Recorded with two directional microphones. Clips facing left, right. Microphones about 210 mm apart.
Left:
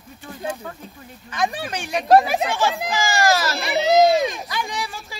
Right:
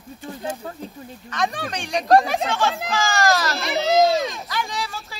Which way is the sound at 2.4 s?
15° left (ahead or behind).